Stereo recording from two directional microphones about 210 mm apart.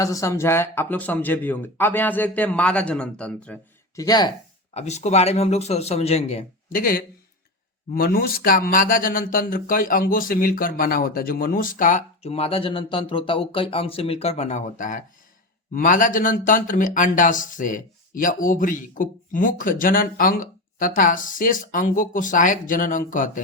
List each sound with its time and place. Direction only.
0.0 s speech: 15° left (ahead or behind)
3.9 s speech: 20° left (ahead or behind)
4.7 s speech: 30° left (ahead or behind)